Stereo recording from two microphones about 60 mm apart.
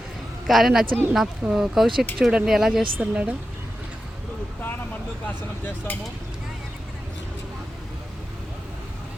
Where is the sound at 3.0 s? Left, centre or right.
Right.